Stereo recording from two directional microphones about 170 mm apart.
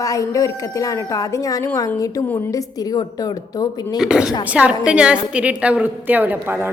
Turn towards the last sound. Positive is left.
turn(degrees=-10)  # may be behind; listen again after turning